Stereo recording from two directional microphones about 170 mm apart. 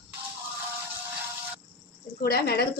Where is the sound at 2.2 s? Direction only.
65° left (ahead or behind).